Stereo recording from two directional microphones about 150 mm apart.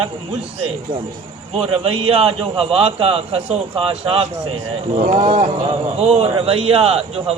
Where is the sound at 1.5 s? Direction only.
40° right (ahead or behind).